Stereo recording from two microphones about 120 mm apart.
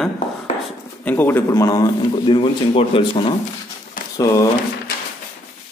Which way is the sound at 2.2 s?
45° left (ahead or behind).